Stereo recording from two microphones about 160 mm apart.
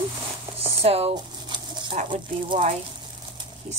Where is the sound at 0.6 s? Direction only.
40° right (ahead or behind).